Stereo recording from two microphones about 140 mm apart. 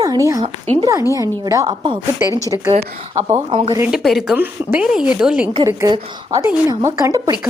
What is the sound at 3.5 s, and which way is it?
Speech, 35° right (ahead or behind).